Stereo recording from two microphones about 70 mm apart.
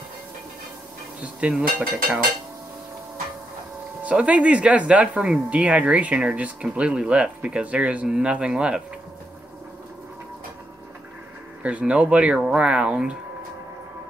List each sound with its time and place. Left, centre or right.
1.2 s speech: centre
4.0 s speech: centre
11.8 s speech: centre